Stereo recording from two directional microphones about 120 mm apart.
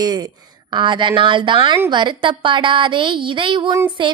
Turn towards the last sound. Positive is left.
turn(degrees=-40)  # may be behind; listen again after turning